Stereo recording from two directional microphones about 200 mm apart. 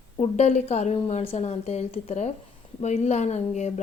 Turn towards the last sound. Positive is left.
turn(degrees=35)  # may be behind; listen again after turning